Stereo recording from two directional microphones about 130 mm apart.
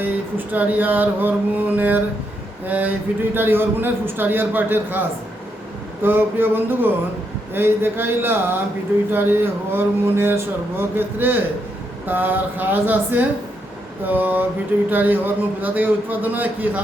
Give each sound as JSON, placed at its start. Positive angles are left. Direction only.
{"t": 0.0, "sound": "a man's voice", "side_deg": -15}